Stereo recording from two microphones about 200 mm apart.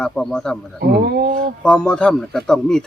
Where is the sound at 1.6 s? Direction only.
5° left (ahead or behind).